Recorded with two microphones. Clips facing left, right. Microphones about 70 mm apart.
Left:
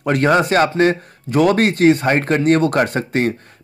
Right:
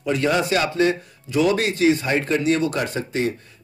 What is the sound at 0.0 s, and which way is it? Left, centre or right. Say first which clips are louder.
A man's voice: left 6 dB; left.